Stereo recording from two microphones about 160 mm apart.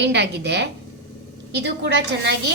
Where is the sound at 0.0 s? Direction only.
90° right.